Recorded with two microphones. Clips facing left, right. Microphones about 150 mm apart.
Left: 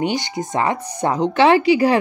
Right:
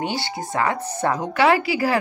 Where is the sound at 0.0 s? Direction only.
20° left (ahead or behind).